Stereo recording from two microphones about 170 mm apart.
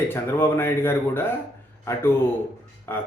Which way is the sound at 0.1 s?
15° left (ahead or behind).